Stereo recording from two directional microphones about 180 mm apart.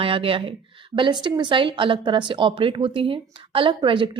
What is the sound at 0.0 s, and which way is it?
Speech, 30° right (ahead or behind).